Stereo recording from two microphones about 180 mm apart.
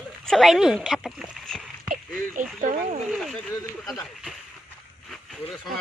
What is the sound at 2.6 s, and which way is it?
Speech, 45° right (ahead or behind).